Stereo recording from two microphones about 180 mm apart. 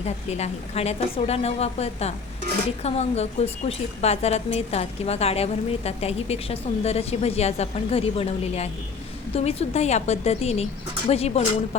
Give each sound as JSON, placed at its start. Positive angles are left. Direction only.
{"t": 0.0, "sound": "a woman's voice", "side_deg": 35}